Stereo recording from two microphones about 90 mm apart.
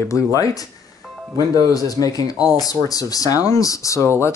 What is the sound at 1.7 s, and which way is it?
Speech, 40° left (ahead or behind).